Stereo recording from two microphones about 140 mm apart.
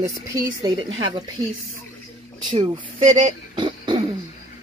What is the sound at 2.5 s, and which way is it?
Speech, 35° right (ahead or behind).